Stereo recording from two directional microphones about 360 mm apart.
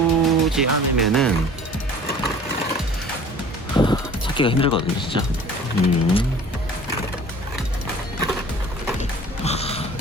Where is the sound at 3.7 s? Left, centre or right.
Centre.